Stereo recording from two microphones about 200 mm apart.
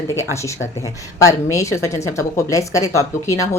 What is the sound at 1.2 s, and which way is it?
A woman's voice, 15° left (ahead or behind).